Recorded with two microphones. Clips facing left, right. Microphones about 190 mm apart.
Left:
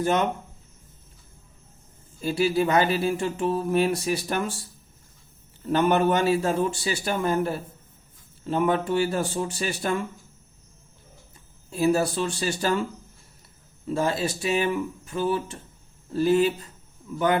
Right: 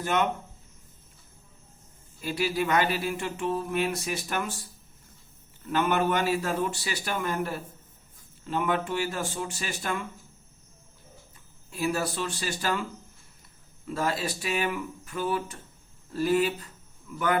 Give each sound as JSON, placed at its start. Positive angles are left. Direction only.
{"t": 0.0, "sound": "speech", "side_deg": 35}
{"t": 2.2, "sound": "speech", "side_deg": 30}
{"t": 5.6, "sound": "speech", "side_deg": 35}
{"t": 11.7, "sound": "speech", "side_deg": 30}
{"t": 13.8, "sound": "speech", "side_deg": 25}